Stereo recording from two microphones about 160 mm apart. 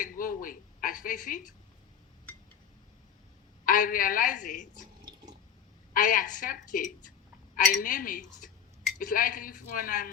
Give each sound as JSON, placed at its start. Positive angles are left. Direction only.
{"t": 0.0, "sound": "a woman's voice", "side_deg": 60}
{"t": 3.7, "sound": "a woman's voice", "side_deg": 60}
{"t": 5.9, "sound": "a woman's voice", "side_deg": 60}